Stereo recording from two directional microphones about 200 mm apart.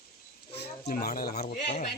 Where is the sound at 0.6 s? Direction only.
35° left (ahead or behind).